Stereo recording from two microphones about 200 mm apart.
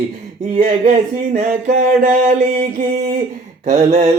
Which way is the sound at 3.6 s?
40° right (ahead or behind).